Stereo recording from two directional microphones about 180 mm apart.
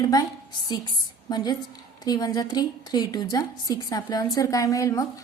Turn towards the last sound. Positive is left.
turn(degrees=20)  # may be behind; listen again after turning